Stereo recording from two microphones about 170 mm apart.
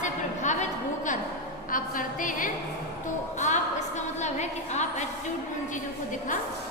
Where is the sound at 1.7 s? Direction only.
55° left (ahead or behind).